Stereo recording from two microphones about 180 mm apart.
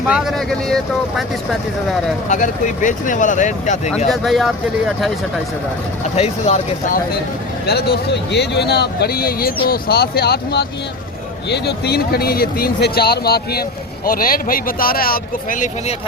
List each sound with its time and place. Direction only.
0.1 s speech: centre (ahead or behind)
2.3 s speech: 45° left (ahead or behind)
4.1 s speech: centre (ahead or behind)
6.1 s speech: 35° left (ahead or behind)
7.7 s speech: 65° left (ahead or behind); by 16.0 s 45° left (ahead or behind)